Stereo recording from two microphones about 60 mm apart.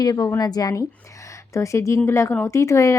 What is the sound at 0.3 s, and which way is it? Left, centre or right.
Speech, left.